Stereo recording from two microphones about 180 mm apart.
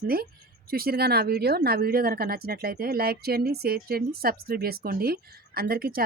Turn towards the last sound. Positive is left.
turn(degrees=-55)  # may be behind; listen again after turning